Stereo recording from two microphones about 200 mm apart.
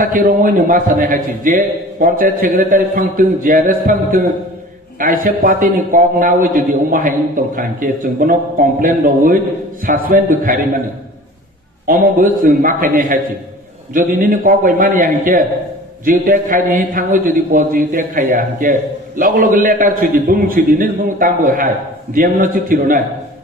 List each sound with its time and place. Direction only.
0.0 s a man's voice: 45° right (ahead or behind)
11.8 s a man's voice: 45° right (ahead or behind)